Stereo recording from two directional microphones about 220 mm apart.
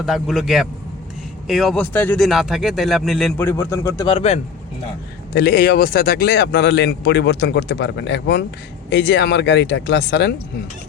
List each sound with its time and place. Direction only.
0.0 s speech: centre (ahead or behind); by 4.4 s 25° left (ahead or behind)
5.3 s speech: 45° left (ahead or behind)